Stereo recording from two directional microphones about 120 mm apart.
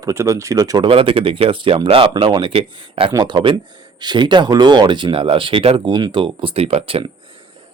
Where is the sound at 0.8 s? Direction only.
50° right (ahead or behind).